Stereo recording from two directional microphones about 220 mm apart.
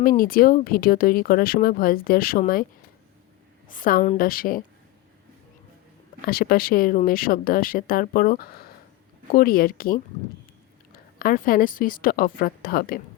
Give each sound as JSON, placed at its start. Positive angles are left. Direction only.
{"t": 0.0, "sound": "speech", "side_deg": 40}
{"t": 3.7, "sound": "speech", "side_deg": 40}
{"t": 6.2, "sound": "speech", "side_deg": 40}
{"t": 11.2, "sound": "speech", "side_deg": 40}